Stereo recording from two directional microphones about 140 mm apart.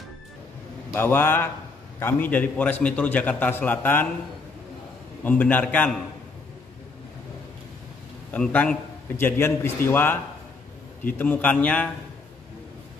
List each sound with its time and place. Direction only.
0.9 s a man's voice: 15° left (ahead or behind)
5.2 s a man's voice: 10° left (ahead or behind)
8.3 s a man's voice: 10° left (ahead or behind)
11.1 s a man's voice: 10° left (ahead or behind)